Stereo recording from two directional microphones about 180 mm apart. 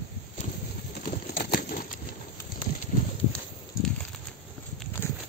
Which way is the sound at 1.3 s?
60° left (ahead or behind).